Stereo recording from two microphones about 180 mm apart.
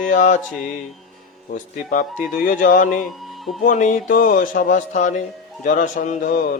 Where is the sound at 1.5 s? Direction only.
45° left (ahead or behind).